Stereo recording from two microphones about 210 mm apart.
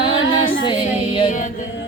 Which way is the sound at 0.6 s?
25° left (ahead or behind).